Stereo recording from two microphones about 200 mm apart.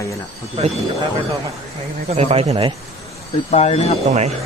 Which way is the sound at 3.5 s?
30° left (ahead or behind).